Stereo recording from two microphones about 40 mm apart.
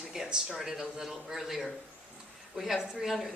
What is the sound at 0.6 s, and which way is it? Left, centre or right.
A woman's voice, centre.